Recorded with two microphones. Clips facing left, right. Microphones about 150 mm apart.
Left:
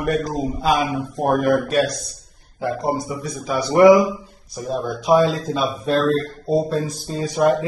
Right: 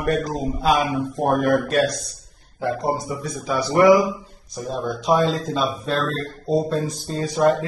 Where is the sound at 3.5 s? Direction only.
20° left (ahead or behind).